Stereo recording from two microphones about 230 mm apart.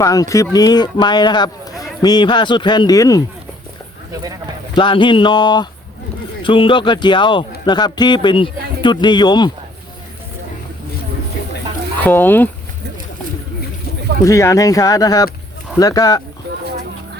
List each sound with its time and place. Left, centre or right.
0.0 s a man's voice: centre
4.7 s a man's voice: left
12.0 s speech: centre
14.3 s speech: centre